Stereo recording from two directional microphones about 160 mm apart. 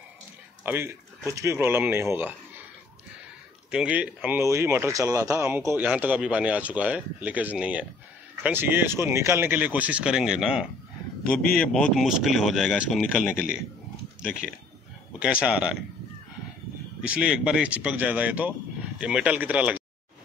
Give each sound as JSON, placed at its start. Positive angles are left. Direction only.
{"t": 0.7, "sound": "speech", "side_deg": -15}
{"t": 3.7, "sound": "speech", "side_deg": -5}
{"t": 15.4, "sound": "speech", "side_deg": -5}
{"t": 17.0, "sound": "speech", "side_deg": -5}